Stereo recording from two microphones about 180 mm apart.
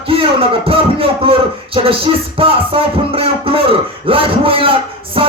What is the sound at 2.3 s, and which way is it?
Music, 30° right (ahead or behind).